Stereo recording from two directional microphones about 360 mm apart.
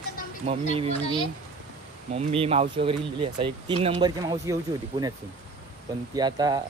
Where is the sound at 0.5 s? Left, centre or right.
Centre.